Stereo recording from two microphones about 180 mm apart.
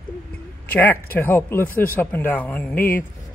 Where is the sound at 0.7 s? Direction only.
10° left (ahead or behind).